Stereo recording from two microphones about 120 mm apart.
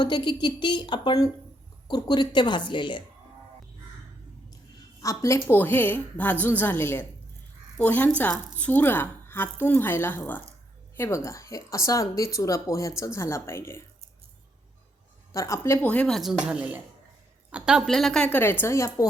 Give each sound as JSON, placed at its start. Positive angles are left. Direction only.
{"t": 0.0, "sound": "speech", "side_deg": 35}
{"t": 4.9, "sound": "a woman's voice", "side_deg": 25}
{"t": 15.3, "sound": "speech", "side_deg": 25}
{"t": 16.4, "sound": "a woman's voice", "side_deg": -10}